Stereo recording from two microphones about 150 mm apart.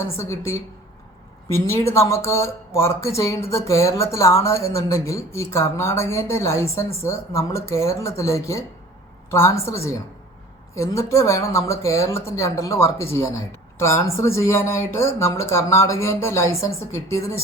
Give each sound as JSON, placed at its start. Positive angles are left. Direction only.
{"t": 0.0, "sound": "a woman's voice", "side_deg": 20}